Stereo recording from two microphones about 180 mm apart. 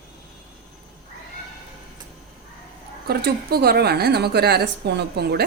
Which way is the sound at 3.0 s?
60° right (ahead or behind).